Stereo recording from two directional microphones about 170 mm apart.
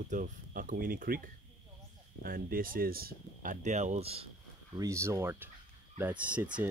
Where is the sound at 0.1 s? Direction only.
50° right (ahead or behind).